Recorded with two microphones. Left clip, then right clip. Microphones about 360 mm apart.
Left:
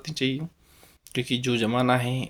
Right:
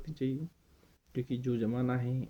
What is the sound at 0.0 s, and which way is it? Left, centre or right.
Speech, right.